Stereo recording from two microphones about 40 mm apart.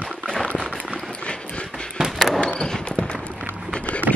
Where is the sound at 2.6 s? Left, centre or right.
Centre.